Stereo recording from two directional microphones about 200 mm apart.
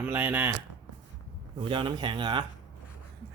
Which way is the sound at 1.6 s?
25° right (ahead or behind).